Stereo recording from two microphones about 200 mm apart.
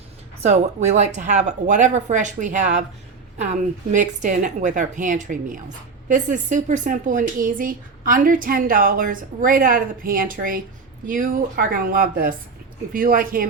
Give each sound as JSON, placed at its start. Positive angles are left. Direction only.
{"t": 0.4, "sound": "speech", "side_deg": -35}